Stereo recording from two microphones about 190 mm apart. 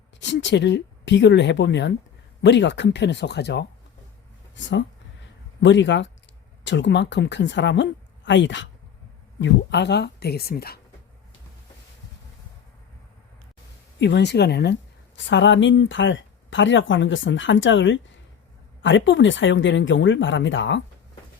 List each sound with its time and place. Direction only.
0.2 s a woman's voice: 70° left (ahead or behind)
14.0 s a woman's voice: 65° left (ahead or behind)